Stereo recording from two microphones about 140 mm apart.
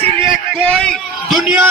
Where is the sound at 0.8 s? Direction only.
5° left (ahead or behind).